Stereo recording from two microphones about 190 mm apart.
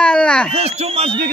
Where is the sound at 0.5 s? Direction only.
35° right (ahead or behind).